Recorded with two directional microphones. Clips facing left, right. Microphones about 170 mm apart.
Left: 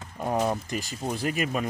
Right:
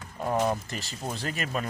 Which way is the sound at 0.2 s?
20° left (ahead or behind).